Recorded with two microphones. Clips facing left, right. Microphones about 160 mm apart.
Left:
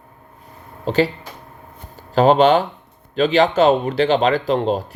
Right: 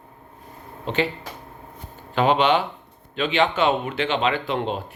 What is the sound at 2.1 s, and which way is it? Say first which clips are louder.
Speech: left 6 dB; 40° left (ahead or behind).